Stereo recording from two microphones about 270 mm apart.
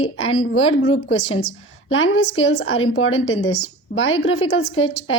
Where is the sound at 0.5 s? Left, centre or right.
Left.